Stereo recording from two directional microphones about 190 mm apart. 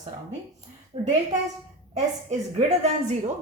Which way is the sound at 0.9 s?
30° right (ahead or behind).